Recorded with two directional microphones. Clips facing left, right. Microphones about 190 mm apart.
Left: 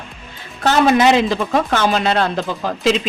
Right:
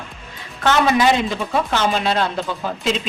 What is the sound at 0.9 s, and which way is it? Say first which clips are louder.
Speech: left 4 dB; 80° left.